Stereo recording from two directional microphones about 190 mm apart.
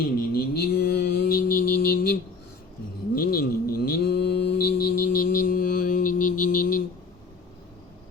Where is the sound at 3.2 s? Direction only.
50° left (ahead or behind).